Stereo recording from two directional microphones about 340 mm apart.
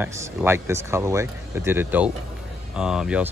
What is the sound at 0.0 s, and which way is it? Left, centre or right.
Speech, centre.